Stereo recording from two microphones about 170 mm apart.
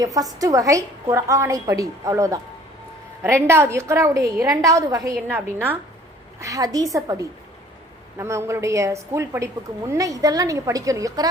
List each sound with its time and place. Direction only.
0.0 s a woman's voice: 20° right (ahead or behind)